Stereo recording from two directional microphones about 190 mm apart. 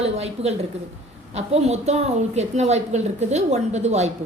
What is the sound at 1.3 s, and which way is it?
A woman's voice, 35° right (ahead or behind).